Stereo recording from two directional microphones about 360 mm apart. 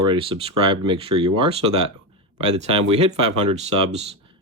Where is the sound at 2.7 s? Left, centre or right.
Centre.